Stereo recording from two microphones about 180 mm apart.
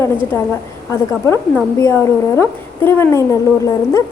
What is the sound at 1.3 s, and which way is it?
A woman's voice, 15° left (ahead or behind).